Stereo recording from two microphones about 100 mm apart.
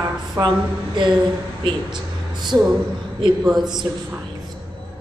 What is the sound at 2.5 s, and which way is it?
Speech, 20° right (ahead or behind).